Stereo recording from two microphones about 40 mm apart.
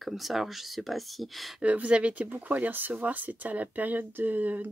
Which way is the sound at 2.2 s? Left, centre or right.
Right.